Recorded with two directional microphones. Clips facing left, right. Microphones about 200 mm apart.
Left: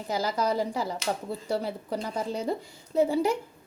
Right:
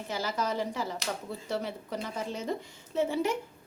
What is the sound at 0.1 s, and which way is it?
A woman's voice, 35° left (ahead or behind).